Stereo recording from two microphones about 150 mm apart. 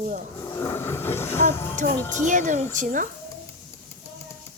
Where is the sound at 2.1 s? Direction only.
55° right (ahead or behind).